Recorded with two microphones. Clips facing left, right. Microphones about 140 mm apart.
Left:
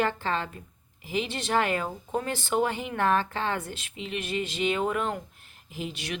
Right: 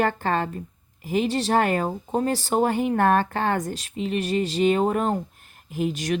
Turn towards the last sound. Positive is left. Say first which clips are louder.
# right 10 dB
turn(degrees=-45)  # may be behind; listen again after turning